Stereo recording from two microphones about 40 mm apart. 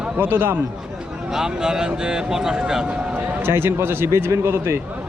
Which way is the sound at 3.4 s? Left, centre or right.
Right.